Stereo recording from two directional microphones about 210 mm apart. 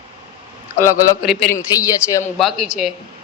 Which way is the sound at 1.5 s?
15° left (ahead or behind).